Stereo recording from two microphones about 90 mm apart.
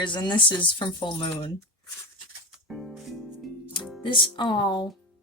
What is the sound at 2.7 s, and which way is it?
Music, centre (ahead or behind).